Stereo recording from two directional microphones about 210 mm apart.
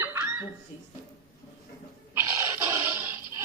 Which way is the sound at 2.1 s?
10° right (ahead or behind).